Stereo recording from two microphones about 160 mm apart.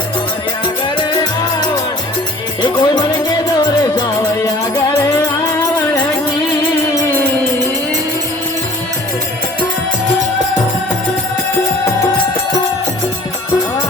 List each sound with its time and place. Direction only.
0.9 s music: 25° left (ahead or behind)